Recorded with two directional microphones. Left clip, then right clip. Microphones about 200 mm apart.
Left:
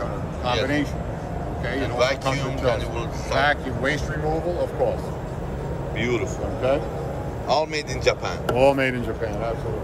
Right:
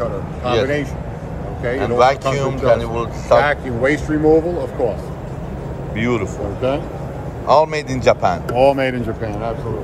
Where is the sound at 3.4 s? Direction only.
25° right (ahead or behind).